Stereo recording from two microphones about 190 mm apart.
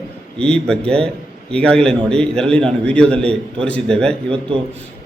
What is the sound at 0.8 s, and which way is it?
Speech, 30° right (ahead or behind).